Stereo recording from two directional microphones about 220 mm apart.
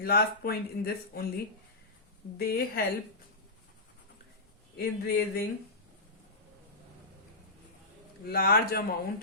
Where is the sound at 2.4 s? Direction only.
45° left (ahead or behind).